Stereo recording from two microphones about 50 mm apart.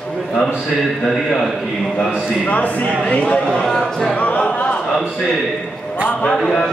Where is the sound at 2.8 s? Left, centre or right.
Centre.